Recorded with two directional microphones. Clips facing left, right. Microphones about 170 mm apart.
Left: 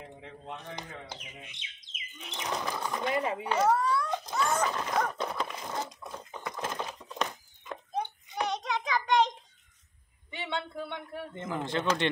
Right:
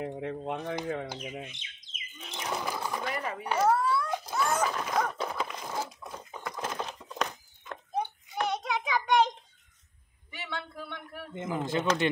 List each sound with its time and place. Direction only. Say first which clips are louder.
0.0 s a sound: right 11 dB; 60° right (ahead or behind)
0.8 s speech: right 10 dB; 60° right (ahead or behind)
1.6 s bird: even; 20° left (ahead or behind)
2.3 s a sound: even; 5° right (ahead or behind)
3.1 s speech: left 4 dB; 25° left (ahead or behind)
3.4 s dog: right 2 dB; 5° right (ahead or behind)
8.5 s child singing: right 1 dB; 5° right (ahead or behind)
10.3 s a sound: left 4 dB; 25° left (ahead or behind)
11.3 s speech: right 2 dB; 10° right (ahead or behind)